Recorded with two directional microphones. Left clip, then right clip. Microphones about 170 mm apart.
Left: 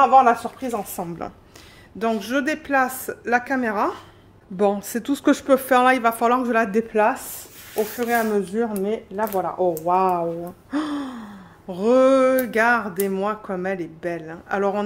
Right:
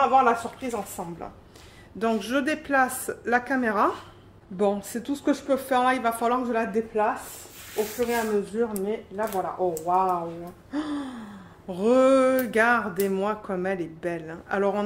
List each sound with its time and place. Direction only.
0.0 s a woman's voice: 65° left (ahead or behind)
2.0 s a sound: 20° left (ahead or behind)
4.6 s a woman's voice: 30° left (ahead or behind)
5.1 s a woman's voice: 55° left (ahead or behind)
8.1 s speech: 90° left
10.7 s speech: 45° left (ahead or behind)
11.0 s a sound: 30° left (ahead or behind)